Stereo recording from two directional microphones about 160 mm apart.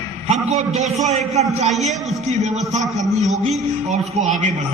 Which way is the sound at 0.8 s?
45° right (ahead or behind).